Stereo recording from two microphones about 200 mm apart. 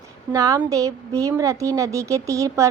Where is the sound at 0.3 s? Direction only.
15° right (ahead or behind).